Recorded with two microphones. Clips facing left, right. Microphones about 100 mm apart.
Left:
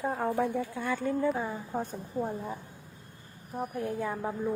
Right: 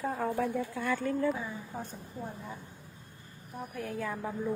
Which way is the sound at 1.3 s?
55° left (ahead or behind).